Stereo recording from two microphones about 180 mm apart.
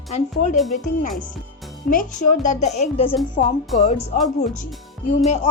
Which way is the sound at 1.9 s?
45° left (ahead or behind).